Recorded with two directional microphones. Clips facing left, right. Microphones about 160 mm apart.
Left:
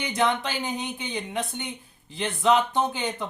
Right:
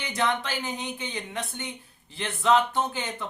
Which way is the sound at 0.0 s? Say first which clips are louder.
Left 3 dB; 15° left (ahead or behind).